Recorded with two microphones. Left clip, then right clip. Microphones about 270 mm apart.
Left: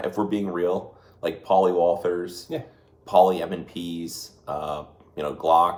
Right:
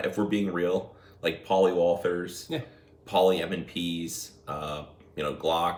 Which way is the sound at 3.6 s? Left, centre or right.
Centre.